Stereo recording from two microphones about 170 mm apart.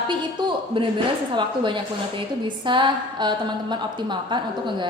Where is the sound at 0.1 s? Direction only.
30° right (ahead or behind).